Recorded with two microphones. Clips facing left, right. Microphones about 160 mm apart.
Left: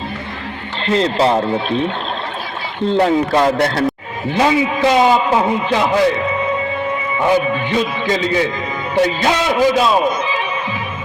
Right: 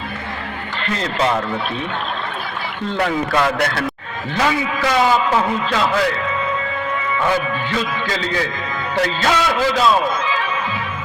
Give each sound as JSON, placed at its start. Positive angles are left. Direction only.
{"t": 0.9, "sound": "speech", "side_deg": 30}
{"t": 2.8, "sound": "a man's voice", "side_deg": 25}